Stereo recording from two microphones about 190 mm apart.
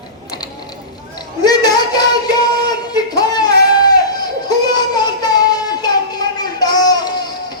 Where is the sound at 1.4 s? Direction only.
20° left (ahead or behind).